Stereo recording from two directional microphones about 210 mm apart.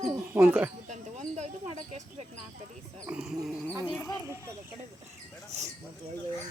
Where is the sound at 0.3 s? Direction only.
5° right (ahead or behind).